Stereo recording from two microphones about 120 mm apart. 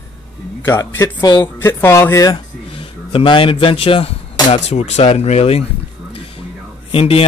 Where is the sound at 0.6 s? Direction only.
20° left (ahead or behind).